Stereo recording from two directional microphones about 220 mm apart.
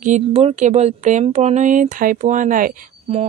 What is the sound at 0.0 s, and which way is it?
Speech, 30° right (ahead or behind).